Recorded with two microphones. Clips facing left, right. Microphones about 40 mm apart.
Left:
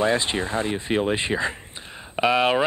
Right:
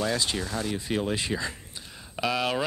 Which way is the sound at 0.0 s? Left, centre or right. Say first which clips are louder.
Left 6 dB; left.